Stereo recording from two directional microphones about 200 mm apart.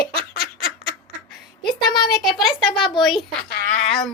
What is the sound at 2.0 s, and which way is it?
Child singing, centre (ahead or behind).